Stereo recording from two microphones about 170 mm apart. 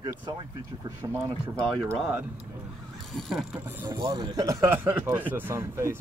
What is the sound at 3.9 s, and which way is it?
Speech, 25° right (ahead or behind).